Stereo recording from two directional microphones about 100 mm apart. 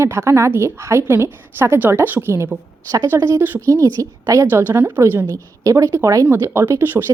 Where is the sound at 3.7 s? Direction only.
35° right (ahead or behind).